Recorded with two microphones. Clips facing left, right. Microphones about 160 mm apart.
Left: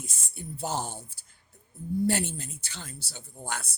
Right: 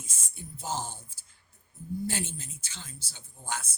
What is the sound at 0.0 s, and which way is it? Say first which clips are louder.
Speech: left 5 dB; 65° left (ahead or behind).